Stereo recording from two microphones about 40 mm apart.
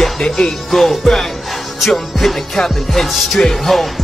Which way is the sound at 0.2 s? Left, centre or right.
Left.